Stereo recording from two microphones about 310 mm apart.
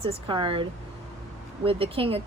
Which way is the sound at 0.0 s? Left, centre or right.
Centre.